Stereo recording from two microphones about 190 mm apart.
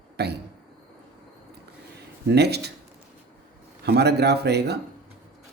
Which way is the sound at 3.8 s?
60° right (ahead or behind).